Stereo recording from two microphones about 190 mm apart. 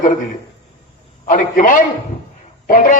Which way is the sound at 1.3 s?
45° left (ahead or behind).